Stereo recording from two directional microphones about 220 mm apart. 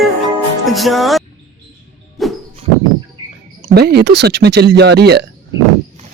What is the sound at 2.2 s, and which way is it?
Music, centre (ahead or behind).